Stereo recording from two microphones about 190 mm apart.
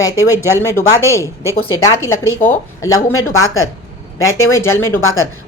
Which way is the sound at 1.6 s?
90° left.